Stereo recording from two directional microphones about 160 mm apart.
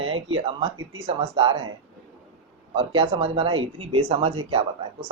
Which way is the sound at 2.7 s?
35° right (ahead or behind).